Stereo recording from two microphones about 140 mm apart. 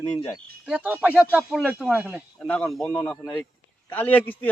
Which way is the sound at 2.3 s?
5° left (ahead or behind).